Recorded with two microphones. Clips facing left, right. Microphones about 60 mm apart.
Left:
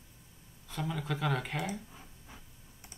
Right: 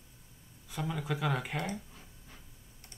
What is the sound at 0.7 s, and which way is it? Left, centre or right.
Speech, centre.